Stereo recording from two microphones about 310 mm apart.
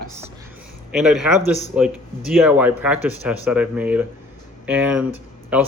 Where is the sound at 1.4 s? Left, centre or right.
Left.